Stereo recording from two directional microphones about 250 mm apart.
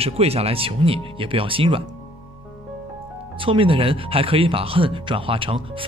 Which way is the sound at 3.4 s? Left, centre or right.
Right.